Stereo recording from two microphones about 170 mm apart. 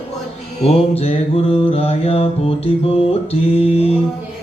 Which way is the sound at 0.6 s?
35° left (ahead or behind).